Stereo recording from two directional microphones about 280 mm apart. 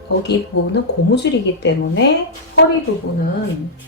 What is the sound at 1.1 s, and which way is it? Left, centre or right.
Speech, left.